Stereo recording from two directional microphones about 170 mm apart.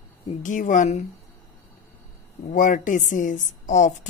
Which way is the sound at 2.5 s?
50° left (ahead or behind).